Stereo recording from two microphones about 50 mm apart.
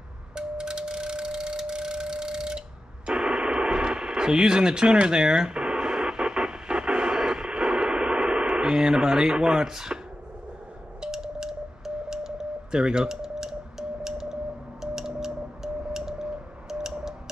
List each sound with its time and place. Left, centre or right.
0.4 s music: centre
3.1 s radio: centre
11.0 s radio: centre
15.8 s a sound: centre